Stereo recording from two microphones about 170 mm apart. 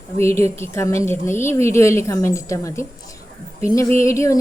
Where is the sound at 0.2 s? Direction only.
15° left (ahead or behind).